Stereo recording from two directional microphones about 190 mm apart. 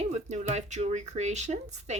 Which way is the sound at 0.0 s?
35° right (ahead or behind).